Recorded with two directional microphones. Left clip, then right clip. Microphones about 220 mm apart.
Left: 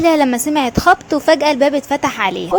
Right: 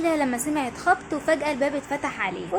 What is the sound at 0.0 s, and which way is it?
A woman's voice, 35° left (ahead or behind).